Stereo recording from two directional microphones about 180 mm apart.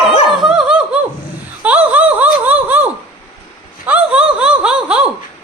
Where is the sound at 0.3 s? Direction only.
Centre (ahead or behind).